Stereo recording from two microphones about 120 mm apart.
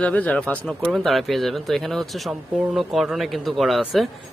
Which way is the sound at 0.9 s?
Centre (ahead or behind).